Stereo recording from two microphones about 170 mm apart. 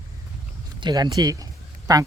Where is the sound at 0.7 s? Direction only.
25° right (ahead or behind).